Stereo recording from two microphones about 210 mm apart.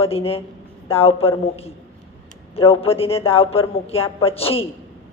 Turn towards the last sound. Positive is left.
turn(degrees=25)  # may be behind; listen again after turning